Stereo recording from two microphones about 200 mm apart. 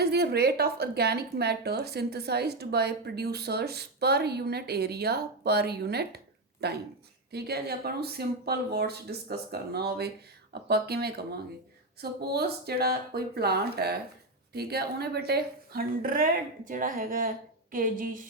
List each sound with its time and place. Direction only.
0.0 s a woman's voice: 55° right (ahead or behind)